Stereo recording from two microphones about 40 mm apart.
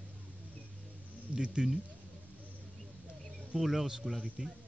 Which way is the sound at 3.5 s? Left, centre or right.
Centre.